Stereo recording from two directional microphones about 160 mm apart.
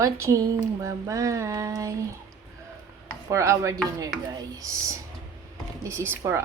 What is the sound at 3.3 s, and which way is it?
Speech, 20° right (ahead or behind).